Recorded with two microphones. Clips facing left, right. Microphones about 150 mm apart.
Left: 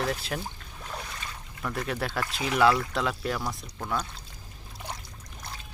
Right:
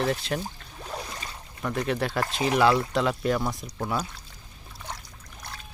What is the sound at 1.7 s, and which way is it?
Speech, centre (ahead or behind).